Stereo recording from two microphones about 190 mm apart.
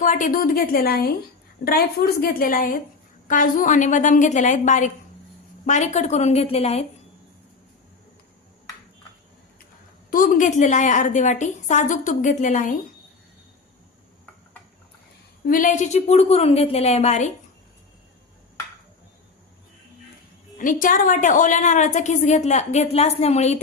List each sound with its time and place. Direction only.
0.0 s a woman's voice: 45° left (ahead or behind)
10.1 s a woman's voice: 45° left (ahead or behind)
15.4 s a woman's voice: 45° left (ahead or behind)
20.6 s a woman's voice: 45° left (ahead or behind)